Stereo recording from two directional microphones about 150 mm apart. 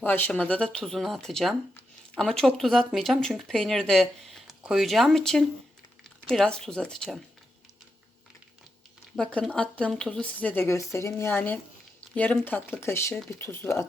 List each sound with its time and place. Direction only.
0.0 s speech: 10° left (ahead or behind)
9.1 s speech: 5° left (ahead or behind)